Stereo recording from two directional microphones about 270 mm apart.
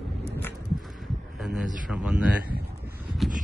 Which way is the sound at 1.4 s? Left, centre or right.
Centre.